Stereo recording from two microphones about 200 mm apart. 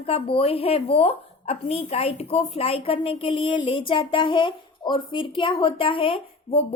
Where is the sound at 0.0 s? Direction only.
30° left (ahead or behind).